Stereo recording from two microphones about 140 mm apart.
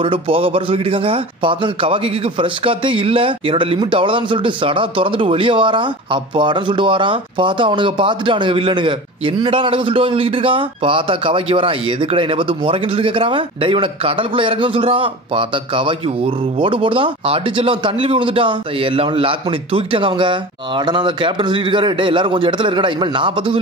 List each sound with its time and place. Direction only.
0.0 s speech: 40° right (ahead or behind)